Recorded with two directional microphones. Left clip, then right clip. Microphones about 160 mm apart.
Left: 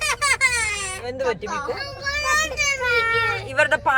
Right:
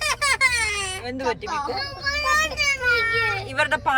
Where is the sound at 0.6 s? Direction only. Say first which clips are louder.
Even; 25° right (ahead or behind).